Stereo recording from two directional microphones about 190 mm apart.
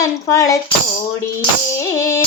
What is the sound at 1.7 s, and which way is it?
Female singing, 15° left (ahead or behind).